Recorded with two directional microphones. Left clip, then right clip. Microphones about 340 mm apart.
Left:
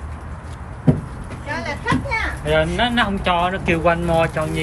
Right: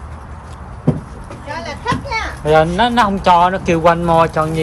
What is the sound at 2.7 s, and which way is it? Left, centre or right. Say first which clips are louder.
Speech: right 6 dB; centre.